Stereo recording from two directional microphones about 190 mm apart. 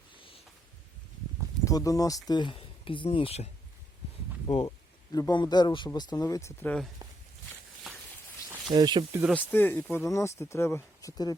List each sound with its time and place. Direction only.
0.2 s a sound: 25° left (ahead or behind)
1.6 s speech: 15° left (ahead or behind)
8.7 s speech: 20° right (ahead or behind)
9.3 s speech: 10° left (ahead or behind)